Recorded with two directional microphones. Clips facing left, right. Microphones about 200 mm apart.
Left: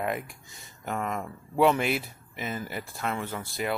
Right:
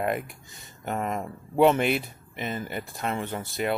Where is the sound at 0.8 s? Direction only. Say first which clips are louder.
Right 2 dB; 25° right (ahead or behind).